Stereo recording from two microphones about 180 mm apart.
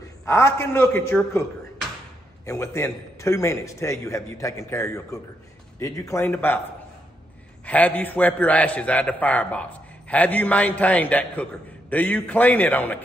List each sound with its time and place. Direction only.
0.2 s a man's voice: 15° left (ahead or behind)
2.4 s a man's voice: 15° left (ahead or behind)
7.6 s a man's voice: 10° left (ahead or behind)